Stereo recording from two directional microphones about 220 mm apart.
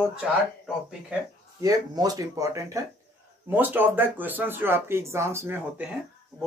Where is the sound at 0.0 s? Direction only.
5° right (ahead or behind).